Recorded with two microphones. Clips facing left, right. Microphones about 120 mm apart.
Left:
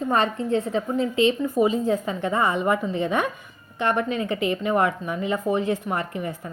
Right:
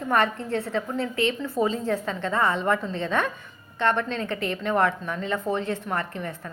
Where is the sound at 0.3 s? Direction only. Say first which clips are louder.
Left 4 dB; 15° left (ahead or behind).